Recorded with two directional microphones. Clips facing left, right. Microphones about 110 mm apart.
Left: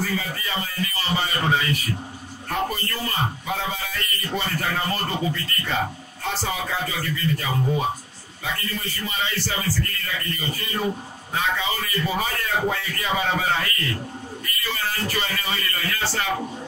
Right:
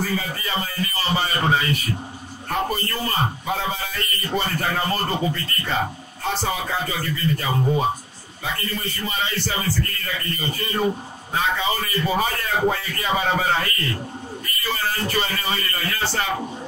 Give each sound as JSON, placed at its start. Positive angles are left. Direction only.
{"t": 0.0, "sound": "speech", "side_deg": -35}
{"t": 8.5, "sound": "speech", "side_deg": -35}